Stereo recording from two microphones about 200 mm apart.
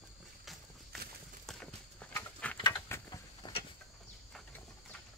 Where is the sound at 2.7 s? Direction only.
15° left (ahead or behind).